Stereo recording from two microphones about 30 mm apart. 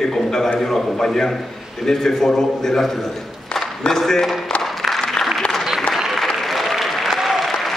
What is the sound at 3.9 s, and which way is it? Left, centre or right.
Speech, centre.